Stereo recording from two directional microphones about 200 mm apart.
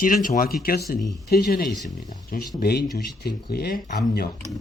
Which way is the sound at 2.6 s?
50° left (ahead or behind).